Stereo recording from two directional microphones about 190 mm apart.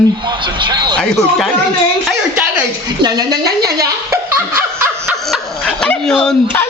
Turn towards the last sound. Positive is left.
turn(degrees=10)  # may be behind; listen again after turning